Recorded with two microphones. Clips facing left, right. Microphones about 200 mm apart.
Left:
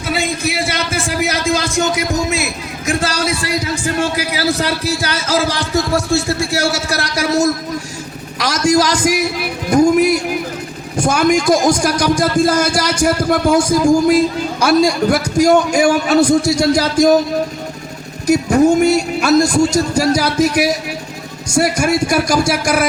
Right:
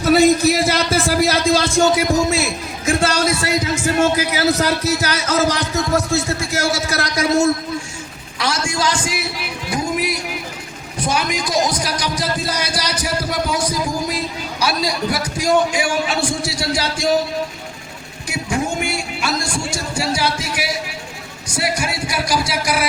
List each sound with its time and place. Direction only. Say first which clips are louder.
0.4 s speech: right 4 dB; 35° right (ahead or behind)
3.1 s speech: right 1 dB; 30° left (ahead or behind)
8.7 s a man's voice: left 8 dB; 40° left (ahead or behind)
18.3 s a man's voice: left 11 dB; 40° left (ahead or behind)